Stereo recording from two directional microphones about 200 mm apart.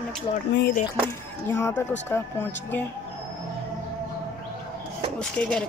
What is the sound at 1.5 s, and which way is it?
A woman's voice, 10° left (ahead or behind).